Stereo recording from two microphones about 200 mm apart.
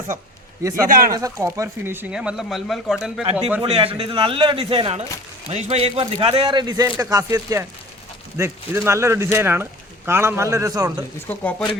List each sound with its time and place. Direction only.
0.9 s speech: 45° right (ahead or behind)
1.1 s speech: 15° right (ahead or behind)
3.6 s a man's voice: 25° right (ahead or behind)
11.3 s speech: 10° left (ahead or behind)